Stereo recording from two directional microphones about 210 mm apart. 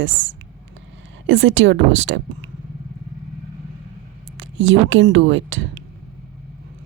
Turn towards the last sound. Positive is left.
turn(degrees=-65)  # may be behind; listen again after turning